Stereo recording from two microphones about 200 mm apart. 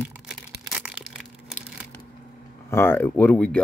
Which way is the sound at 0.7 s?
Centre (ahead or behind).